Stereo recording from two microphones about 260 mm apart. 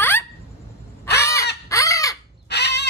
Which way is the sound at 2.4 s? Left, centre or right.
Left.